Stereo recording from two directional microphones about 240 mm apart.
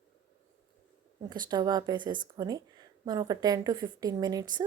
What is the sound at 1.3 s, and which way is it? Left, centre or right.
A woman's voice, centre.